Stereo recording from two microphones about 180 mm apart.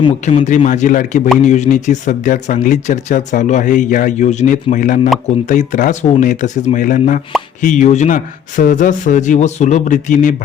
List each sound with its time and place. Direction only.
0.3 s speech: 40° left (ahead or behind)